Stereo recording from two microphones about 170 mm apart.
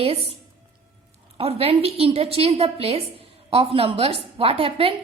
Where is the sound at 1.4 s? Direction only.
35° right (ahead or behind).